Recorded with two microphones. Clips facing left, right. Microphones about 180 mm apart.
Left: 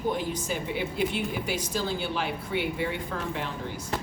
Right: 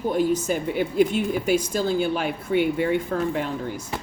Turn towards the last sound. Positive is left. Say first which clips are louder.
# right 7 dB
turn(degrees=-50)  # may be behind; listen again after turning